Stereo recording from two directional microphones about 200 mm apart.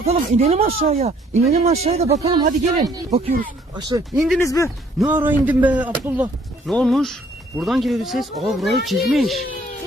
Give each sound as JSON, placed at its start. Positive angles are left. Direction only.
{"t": 0.0, "sound": "speech", "side_deg": -30}
{"t": 4.1, "sound": "speech", "side_deg": 0}
{"t": 4.4, "sound": "speech", "side_deg": 15}
{"t": 4.9, "sound": "speech", "side_deg": -10}